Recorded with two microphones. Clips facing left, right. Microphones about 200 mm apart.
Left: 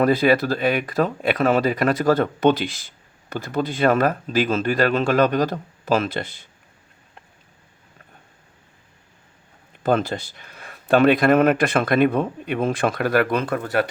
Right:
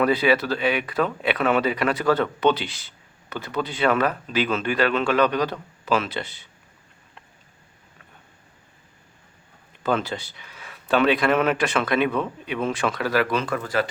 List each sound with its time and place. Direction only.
0.0 s speech: 45° left (ahead or behind)
9.8 s speech: 50° left (ahead or behind)